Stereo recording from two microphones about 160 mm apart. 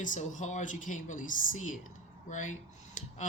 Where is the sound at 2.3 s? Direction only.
50° left (ahead or behind).